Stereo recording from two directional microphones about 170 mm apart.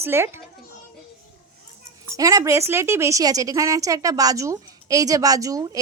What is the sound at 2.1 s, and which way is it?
A woman's voice, 20° right (ahead or behind).